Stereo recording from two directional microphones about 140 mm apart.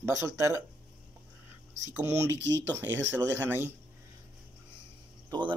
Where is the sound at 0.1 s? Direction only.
20° right (ahead or behind).